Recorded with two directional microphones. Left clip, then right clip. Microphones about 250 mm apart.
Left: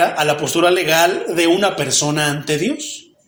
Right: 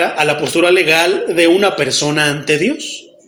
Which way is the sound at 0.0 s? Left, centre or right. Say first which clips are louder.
Right 1 dB; left.